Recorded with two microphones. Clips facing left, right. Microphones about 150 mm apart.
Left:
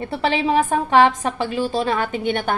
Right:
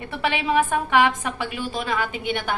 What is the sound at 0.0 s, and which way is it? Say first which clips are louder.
A woman's voice: left 5 dB; 35° left (ahead or behind).